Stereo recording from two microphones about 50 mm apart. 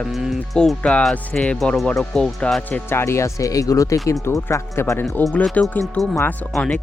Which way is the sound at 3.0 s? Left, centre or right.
Left.